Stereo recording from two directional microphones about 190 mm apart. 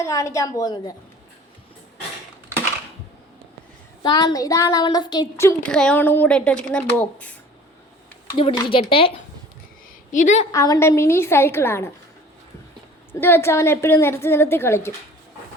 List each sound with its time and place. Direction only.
0.0 s a woman's voice: 15° left (ahead or behind)
4.0 s a woman's voice: 20° left (ahead or behind); by 7.3 s 5° left (ahead or behind)
8.5 s speech: 25° left (ahead or behind)
10.1 s a woman's voice: 40° left (ahead or behind)
10.5 s a woman's voice: 20° left (ahead or behind)
13.1 s a woman's voice: 10° left (ahead or behind)